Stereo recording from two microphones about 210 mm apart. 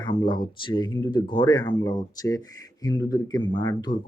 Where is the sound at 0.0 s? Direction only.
25° left (ahead or behind).